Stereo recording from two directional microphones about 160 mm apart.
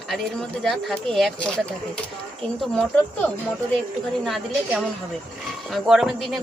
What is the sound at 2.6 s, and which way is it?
Speech, 5° left (ahead or behind).